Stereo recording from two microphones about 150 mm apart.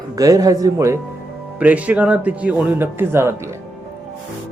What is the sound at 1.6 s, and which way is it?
Speech, 10° right (ahead or behind).